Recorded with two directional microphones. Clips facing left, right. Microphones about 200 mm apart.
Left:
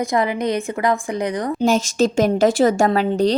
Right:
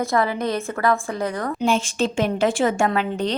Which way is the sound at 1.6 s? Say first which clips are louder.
Left 5 dB; 40° left (ahead or behind).